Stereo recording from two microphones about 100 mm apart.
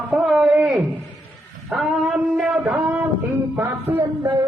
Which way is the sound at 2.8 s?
15° right (ahead or behind).